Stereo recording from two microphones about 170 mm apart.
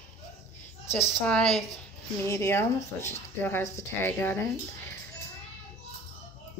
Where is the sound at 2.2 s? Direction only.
15° left (ahead or behind).